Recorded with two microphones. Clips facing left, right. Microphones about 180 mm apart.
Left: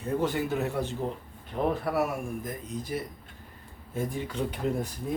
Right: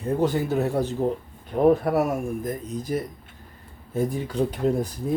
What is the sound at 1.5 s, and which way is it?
Speech, 50° right (ahead or behind).